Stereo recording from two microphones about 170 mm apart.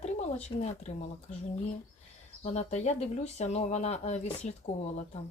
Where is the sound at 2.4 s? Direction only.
40° left (ahead or behind).